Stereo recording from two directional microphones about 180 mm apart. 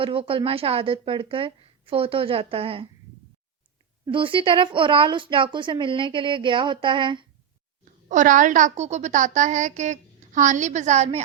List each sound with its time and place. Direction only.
0.0 s a woman's voice: 30° right (ahead or behind)
4.0 s speech: 30° right (ahead or behind)
8.1 s a woman's voice: 45° right (ahead or behind)